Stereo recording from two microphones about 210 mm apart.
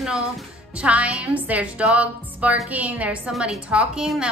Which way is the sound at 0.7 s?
5° right (ahead or behind).